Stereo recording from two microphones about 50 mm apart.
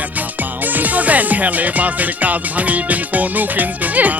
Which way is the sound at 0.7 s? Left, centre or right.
Right.